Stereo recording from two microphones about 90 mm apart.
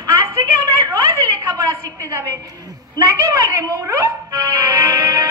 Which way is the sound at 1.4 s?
40° right (ahead or behind).